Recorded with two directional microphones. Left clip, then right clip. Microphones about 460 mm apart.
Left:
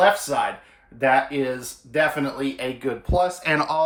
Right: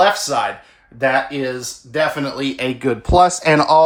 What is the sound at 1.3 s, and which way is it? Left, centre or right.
Speech, centre.